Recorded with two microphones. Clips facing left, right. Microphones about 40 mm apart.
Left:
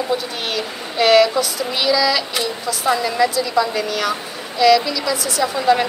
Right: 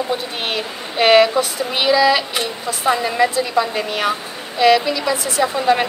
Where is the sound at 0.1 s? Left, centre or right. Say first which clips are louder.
Even; right.